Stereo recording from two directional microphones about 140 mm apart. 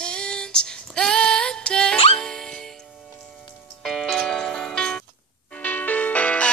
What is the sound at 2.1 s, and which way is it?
Music, 5° left (ahead or behind).